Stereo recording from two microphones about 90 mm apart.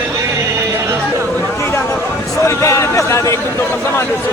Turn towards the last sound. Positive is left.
turn(degrees=35)  # may be behind; listen again after turning